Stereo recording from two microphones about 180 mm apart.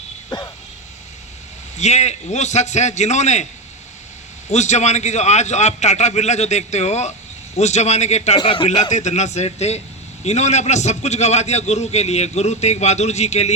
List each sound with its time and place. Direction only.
0.3 s speech: 20° left (ahead or behind)
1.8 s a man's voice: 40° left (ahead or behind)
4.5 s a man's voice: 40° left (ahead or behind)
8.4 s speech: 25° left (ahead or behind)
8.9 s a man's voice: 40° left (ahead or behind)